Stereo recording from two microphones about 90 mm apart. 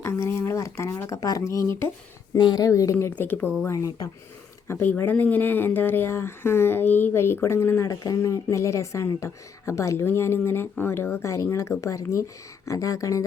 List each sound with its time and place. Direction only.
0.0 s speech: 30° left (ahead or behind)
2.4 s a woman's voice: 55° left (ahead or behind)
2.6 s speech: 35° left (ahead or behind)
3.2 s speech: 20° left (ahead or behind)
3.7 s speech: 40° left (ahead or behind)
4.7 s speech: 25° left (ahead or behind)
7.9 s speech: 40° left (ahead or behind)